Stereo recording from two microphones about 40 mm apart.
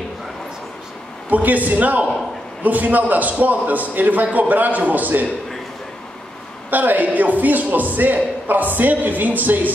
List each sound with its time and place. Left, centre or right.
1.3 s a man's voice: right
6.7 s a man's voice: right